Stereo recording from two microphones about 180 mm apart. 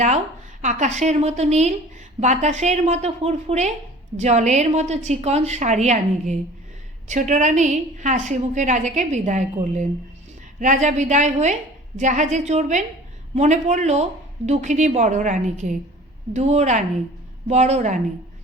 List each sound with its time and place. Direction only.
0.6 s a woman's voice: 40° right (ahead or behind)